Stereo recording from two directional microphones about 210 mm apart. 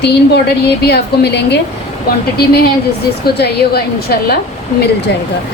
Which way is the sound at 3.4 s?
50° left (ahead or behind).